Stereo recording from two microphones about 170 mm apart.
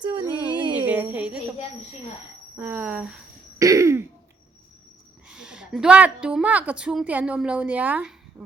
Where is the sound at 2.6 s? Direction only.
10° right (ahead or behind).